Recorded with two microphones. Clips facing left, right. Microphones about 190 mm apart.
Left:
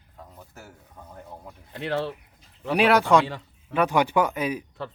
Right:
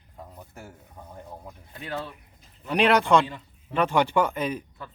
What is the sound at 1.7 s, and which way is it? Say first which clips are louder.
Speech: left 7 dB; 80° left.